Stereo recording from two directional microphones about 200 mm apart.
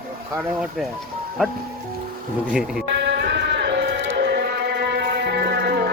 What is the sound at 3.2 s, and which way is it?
Music, 55° right (ahead or behind).